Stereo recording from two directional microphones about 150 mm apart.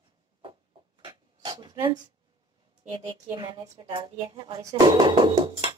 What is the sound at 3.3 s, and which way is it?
Speech, 30° right (ahead or behind).